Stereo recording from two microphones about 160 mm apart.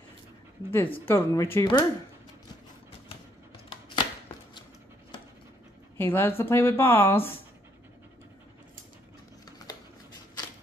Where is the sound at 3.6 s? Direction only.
30° left (ahead or behind).